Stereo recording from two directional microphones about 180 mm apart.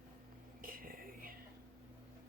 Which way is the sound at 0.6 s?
50° right (ahead or behind).